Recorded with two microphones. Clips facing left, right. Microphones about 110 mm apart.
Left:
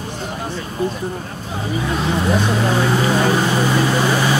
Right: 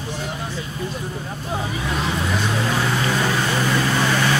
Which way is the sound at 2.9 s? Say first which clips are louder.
Left 5 dB; 25° left (ahead or behind).